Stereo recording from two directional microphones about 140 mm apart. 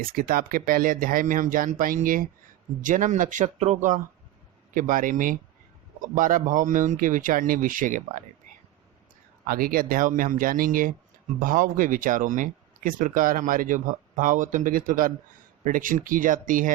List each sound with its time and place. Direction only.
0.0 s speech: 90° right
2.8 s speech: 65° right (ahead or behind)
4.7 s speech: 75° right (ahead or behind)
9.5 s speech: 90° right; by 16.7 s 70° right (ahead or behind)